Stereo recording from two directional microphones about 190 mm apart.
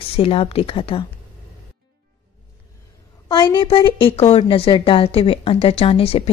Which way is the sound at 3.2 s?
20° left (ahead or behind).